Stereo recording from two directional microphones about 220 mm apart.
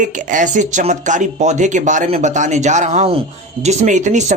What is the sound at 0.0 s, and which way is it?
Speech, 35° right (ahead or behind).